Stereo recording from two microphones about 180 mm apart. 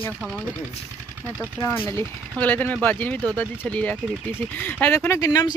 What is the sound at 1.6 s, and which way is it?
Speech, 15° left (ahead or behind).